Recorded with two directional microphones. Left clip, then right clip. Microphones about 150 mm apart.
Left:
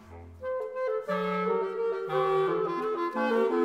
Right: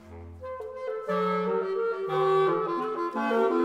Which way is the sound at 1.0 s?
Centre (ahead or behind).